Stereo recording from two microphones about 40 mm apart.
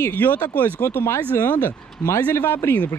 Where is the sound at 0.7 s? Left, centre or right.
Left.